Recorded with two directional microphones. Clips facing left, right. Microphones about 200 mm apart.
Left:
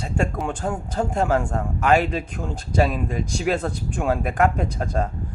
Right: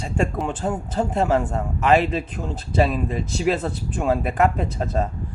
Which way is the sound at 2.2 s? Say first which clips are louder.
Right 1 dB; 10° left (ahead or behind).